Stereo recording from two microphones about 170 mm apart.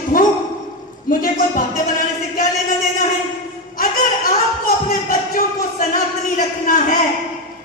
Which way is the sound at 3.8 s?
60° left (ahead or behind).